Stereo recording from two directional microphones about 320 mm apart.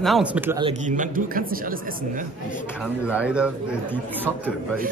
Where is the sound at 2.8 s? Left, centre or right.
Centre.